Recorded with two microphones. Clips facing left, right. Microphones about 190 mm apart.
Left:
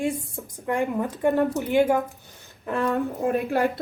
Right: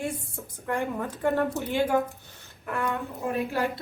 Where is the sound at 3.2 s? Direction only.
55° left (ahead or behind).